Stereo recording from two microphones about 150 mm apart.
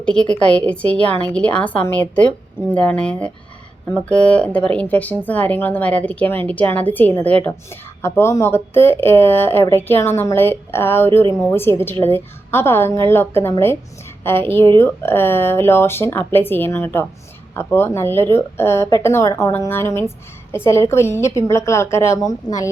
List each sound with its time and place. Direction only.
0.0 s a woman's voice: 5° left (ahead or behind); by 22.7 s 25° left (ahead or behind)